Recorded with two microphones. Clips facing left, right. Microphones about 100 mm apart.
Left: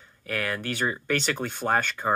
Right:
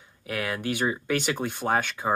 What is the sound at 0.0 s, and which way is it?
Speech, 10° right (ahead or behind).